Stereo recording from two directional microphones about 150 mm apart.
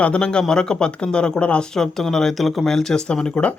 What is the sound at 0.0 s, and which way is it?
Speech, 5° left (ahead or behind).